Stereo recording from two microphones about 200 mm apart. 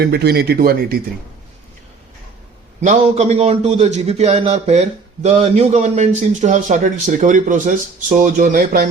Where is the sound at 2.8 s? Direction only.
35° right (ahead or behind).